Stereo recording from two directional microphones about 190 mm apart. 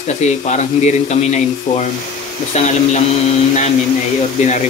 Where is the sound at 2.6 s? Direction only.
35° left (ahead or behind).